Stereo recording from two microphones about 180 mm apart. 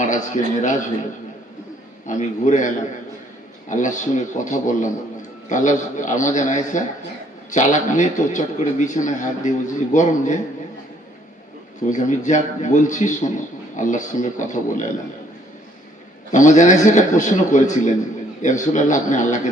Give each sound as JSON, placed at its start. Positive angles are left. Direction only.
{"t": 0.0, "sound": "a man's voice", "side_deg": 45}
{"t": 2.0, "sound": "a man's voice", "side_deg": 45}
{"t": 11.9, "sound": "a man's voice", "side_deg": 45}
{"t": 16.3, "sound": "a man's voice", "side_deg": 45}